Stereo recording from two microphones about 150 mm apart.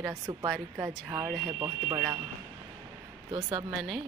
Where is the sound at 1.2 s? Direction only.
5° right (ahead or behind).